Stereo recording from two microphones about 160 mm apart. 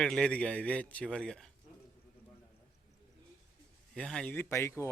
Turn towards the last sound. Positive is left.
turn(degrees=15)  # may be behind; listen again after turning